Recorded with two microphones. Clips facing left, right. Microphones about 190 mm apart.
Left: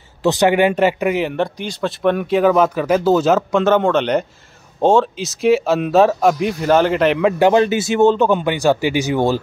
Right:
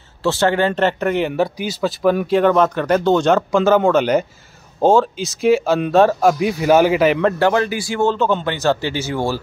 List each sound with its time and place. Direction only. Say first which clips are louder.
0.2 s speech: left 3 dB; 15° left (ahead or behind); by 7.3 s centre (ahead or behind)
7.3 s speech: left 4 dB; 20° left (ahead or behind)